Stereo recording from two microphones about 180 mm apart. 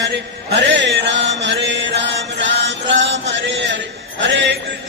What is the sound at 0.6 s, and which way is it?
Chant, 80° right.